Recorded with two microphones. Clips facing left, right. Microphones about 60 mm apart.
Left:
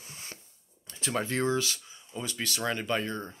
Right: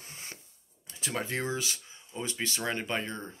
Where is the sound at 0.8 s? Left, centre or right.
Centre.